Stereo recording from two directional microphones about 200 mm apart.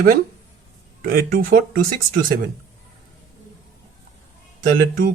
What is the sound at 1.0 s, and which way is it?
Speech, 45° right (ahead or behind).